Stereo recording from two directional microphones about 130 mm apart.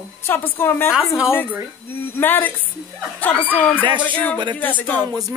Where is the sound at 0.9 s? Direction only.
5° right (ahead or behind).